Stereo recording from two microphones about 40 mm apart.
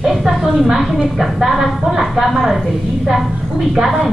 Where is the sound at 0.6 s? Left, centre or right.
Centre.